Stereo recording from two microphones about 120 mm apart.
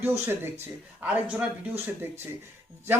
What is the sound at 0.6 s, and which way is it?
Speech, 10° right (ahead or behind).